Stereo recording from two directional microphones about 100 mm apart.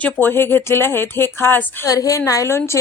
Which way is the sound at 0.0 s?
20° left (ahead or behind).